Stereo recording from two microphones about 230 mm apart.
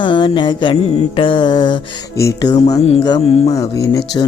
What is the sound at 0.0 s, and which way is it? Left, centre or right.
Mantra, left.